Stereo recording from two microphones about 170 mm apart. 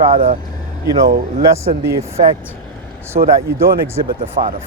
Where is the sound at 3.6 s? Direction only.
60° right (ahead or behind).